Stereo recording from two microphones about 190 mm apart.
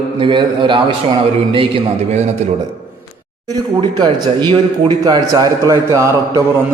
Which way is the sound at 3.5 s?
20° right (ahead or behind).